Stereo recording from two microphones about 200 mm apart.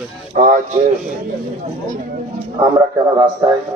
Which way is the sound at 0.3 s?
40° right (ahead or behind).